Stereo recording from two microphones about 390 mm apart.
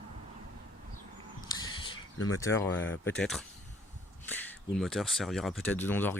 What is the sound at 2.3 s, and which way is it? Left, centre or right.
Speech, centre.